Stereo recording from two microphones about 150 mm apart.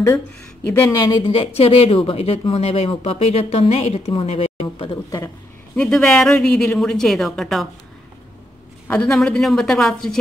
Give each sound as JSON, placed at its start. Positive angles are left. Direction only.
{"t": 0.8, "sound": "speech", "side_deg": 30}
{"t": 5.8, "sound": "speech", "side_deg": 5}
{"t": 8.8, "sound": "speech", "side_deg": 10}